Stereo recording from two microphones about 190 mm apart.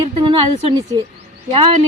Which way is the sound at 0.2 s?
25° right (ahead or behind).